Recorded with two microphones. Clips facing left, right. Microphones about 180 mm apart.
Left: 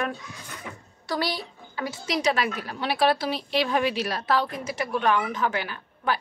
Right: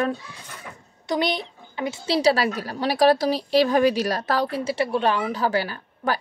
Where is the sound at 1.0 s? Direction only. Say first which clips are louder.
Right 4 dB; 20° right (ahead or behind).